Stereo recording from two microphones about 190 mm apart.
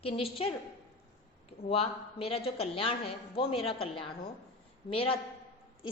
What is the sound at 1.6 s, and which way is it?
A woman's voice, 30° left (ahead or behind).